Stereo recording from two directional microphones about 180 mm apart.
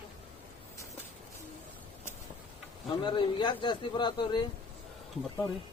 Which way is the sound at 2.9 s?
25° left (ahead or behind).